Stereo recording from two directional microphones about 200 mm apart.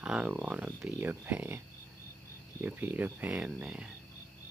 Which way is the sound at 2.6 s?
10° right (ahead or behind).